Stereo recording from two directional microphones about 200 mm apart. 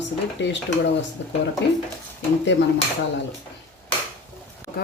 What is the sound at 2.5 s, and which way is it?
Speech, 65° left (ahead or behind).